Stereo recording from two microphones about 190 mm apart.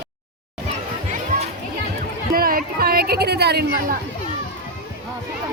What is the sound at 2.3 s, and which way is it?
Chatter, 50° right (ahead or behind).